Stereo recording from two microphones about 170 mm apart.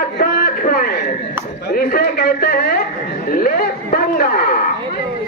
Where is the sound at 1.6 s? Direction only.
60° left (ahead or behind).